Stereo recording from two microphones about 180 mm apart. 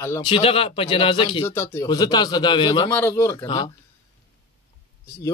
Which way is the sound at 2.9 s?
10° left (ahead or behind).